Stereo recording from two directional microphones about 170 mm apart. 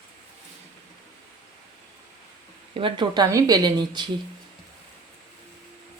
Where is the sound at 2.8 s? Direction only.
30° right (ahead or behind).